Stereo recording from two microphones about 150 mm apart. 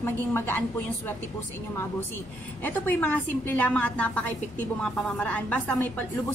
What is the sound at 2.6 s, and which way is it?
A woman's voice, 10° left (ahead or behind).